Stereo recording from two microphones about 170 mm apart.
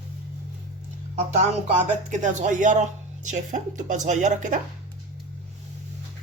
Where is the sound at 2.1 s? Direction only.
50° right (ahead or behind).